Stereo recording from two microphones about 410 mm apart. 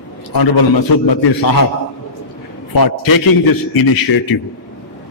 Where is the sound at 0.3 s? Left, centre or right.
Left.